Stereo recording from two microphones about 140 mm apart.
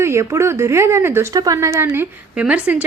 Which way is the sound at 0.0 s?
20° right (ahead or behind).